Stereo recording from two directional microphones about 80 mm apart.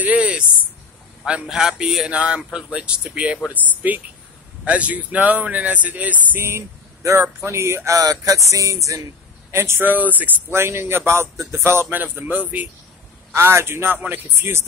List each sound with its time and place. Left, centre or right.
0.0 s a man's voice: centre; by 9.0 s right
9.5 s speech: right
10.5 s speech: right
13.3 s speech: right